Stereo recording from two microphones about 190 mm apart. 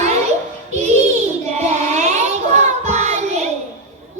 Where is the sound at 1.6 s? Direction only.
35° right (ahead or behind).